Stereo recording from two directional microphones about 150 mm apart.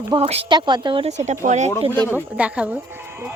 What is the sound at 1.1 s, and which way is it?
Speech, 50° right (ahead or behind).